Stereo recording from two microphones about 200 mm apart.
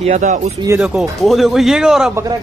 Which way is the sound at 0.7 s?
5° right (ahead or behind).